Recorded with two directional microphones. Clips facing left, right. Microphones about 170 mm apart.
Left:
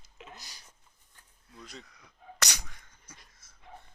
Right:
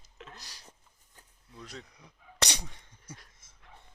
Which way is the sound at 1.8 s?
30° right (ahead or behind).